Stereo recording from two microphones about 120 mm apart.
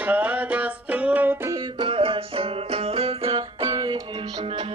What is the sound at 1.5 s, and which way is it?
Music, 40° right (ahead or behind).